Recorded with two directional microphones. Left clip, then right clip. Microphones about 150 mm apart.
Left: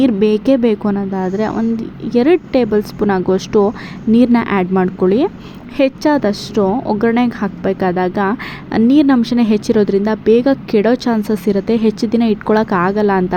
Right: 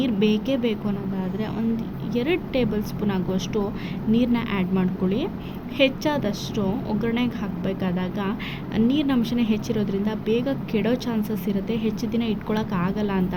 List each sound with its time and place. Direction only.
0.0 s a woman's voice: 50° left (ahead or behind)